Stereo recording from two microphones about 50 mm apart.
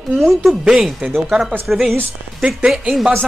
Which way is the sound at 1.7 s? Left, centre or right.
Centre.